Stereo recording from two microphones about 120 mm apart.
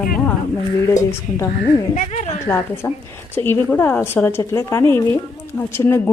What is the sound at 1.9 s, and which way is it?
Speech, 90° left.